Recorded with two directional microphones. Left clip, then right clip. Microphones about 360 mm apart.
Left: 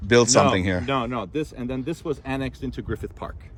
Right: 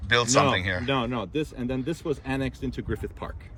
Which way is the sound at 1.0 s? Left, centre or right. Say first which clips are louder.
Left 2 dB; centre.